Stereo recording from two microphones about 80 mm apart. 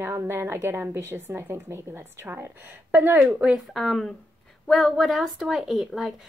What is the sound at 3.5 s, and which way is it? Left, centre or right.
A woman's voice, centre.